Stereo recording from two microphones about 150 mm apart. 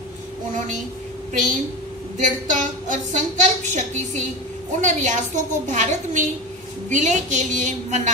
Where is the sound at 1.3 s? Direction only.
60° right (ahead or behind).